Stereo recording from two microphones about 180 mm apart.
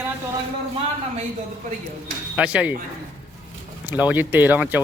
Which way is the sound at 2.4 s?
5° right (ahead or behind).